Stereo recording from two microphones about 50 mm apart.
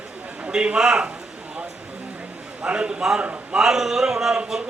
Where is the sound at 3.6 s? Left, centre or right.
Centre.